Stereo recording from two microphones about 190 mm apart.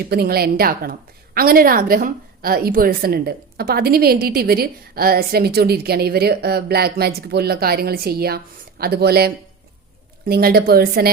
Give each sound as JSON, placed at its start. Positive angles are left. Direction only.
{"t": 0.1, "sound": "a woman's voice", "side_deg": -55}